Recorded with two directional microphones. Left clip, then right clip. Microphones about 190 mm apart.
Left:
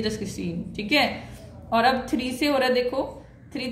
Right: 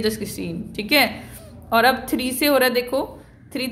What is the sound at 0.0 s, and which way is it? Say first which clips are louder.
A woman's voice: right 5 dB; 45° right (ahead or behind).